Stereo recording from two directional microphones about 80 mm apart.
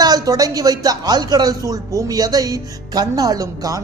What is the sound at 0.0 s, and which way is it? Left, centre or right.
Speech, right.